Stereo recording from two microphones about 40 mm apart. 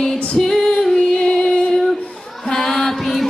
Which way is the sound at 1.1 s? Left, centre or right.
Centre.